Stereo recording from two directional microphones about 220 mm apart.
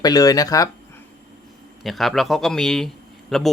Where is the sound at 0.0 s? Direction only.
15° left (ahead or behind).